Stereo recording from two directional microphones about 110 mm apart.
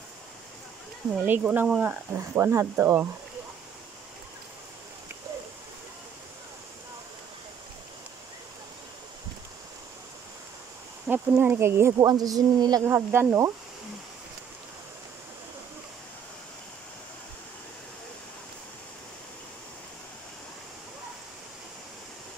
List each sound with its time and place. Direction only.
1.2 s speech: 15° right (ahead or behind)
11.1 s speech: 20° right (ahead or behind); by 12.8 s 40° right (ahead or behind)
12.8 s speech: 20° right (ahead or behind)